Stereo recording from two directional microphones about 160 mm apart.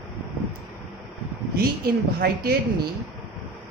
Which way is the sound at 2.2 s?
75° right (ahead or behind).